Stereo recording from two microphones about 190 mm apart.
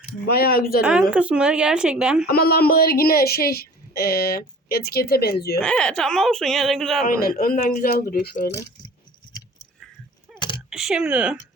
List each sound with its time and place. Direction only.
0.3 s a woman's voice: 55° left (ahead or behind)
0.8 s speech: 5° right (ahead or behind)
2.2 s a woman's voice: 55° left (ahead or behind)
5.5 s speech: 5° left (ahead or behind)
7.1 s a woman's voice: 50° left (ahead or behind)
10.7 s speech: 5° right (ahead or behind)